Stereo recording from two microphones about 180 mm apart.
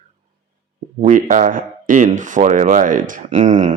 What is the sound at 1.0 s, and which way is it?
Speech, 45° right (ahead or behind).